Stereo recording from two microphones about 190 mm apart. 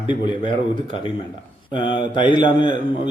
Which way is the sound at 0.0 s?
25° left (ahead or behind).